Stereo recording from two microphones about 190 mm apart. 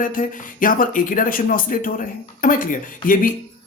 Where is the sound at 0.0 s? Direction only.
45° left (ahead or behind).